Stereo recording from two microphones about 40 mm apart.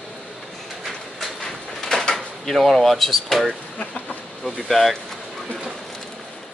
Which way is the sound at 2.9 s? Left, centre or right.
Centre.